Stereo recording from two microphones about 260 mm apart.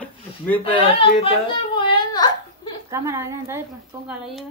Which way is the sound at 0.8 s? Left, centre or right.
Left.